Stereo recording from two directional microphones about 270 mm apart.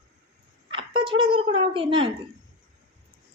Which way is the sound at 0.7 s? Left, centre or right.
Centre.